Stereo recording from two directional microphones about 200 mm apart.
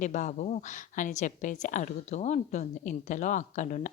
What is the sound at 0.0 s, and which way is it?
Speech, 40° left (ahead or behind).